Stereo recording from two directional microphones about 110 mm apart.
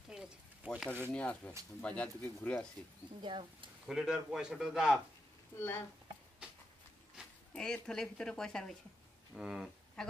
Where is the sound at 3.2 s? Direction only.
50° right (ahead or behind).